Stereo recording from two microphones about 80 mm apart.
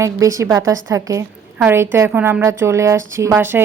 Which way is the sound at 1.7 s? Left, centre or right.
Right.